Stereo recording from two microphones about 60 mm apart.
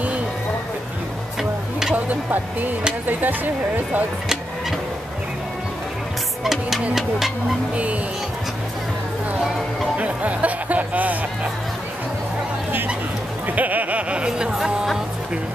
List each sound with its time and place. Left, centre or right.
2.0 s speech: right
6.4 s speech: centre
9.9 s speech: right
13.5 s speech: right